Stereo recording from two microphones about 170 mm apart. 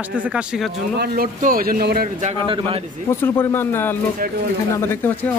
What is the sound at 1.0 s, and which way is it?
A man's voice, 60° right (ahead or behind).